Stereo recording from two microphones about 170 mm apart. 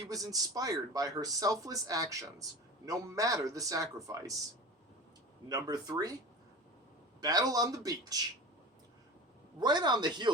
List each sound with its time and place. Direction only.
0.0 s a man's voice: 20° right (ahead or behind)
5.5 s a man's voice: 20° right (ahead or behind)
7.2 s a man's voice: 20° right (ahead or behind)
9.6 s a man's voice: 25° right (ahead or behind)